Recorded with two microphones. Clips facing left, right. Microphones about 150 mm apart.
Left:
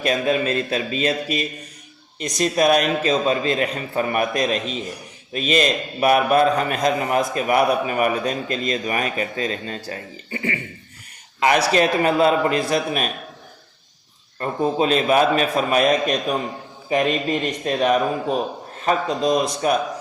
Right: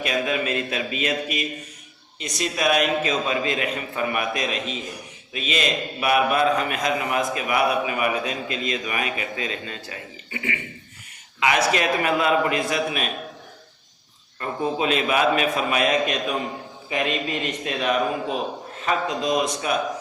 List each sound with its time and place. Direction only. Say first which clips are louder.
0.0 s a man's voice: left 4 dB; 35° left (ahead or behind)
14.3 s a man's voice: left 4 dB; 35° left (ahead or behind)